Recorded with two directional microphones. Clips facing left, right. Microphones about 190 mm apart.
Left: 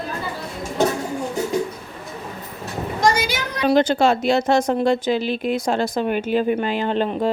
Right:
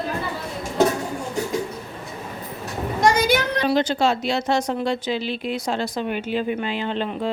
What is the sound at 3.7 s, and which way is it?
Speech, 50° left (ahead or behind).